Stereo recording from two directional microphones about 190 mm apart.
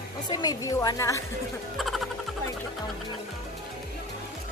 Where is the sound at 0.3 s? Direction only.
20° left (ahead or behind).